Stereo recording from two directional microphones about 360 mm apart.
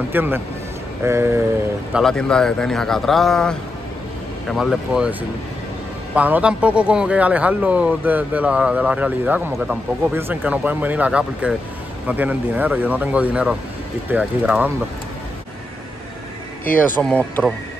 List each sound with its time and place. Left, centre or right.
0.1 s speech: centre
6.1 s speech: centre
16.8 s speech: centre